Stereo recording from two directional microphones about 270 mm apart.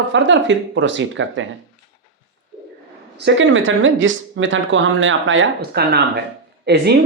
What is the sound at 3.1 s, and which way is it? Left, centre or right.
Speech, right.